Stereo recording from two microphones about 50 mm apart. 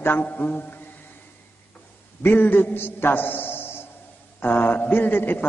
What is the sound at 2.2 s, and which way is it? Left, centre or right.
A man's voice, left.